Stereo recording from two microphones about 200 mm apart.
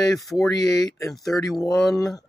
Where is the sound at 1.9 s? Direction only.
15° left (ahead or behind).